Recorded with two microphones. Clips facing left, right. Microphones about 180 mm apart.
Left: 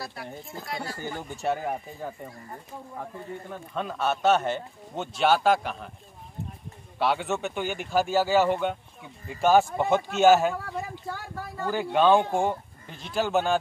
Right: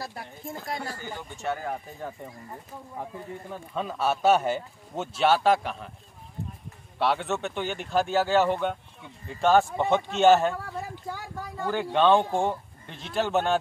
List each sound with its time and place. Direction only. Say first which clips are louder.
0.7 s speech: even; 45° right (ahead or behind)
1.1 s speech: left 4 dB; 35° left (ahead or behind)
1.6 s speech: left 2 dB; 10° left (ahead or behind)
3.0 s speech: right 1 dB; 5° right (ahead or behind)
7.0 s speech: even; centre (ahead or behind)
11.6 s speech: even; 5° left (ahead or behind)